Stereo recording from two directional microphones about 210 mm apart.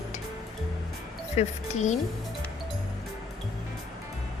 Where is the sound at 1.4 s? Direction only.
35° left (ahead or behind).